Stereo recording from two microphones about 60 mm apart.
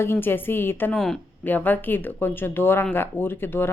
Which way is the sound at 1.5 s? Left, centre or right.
Left.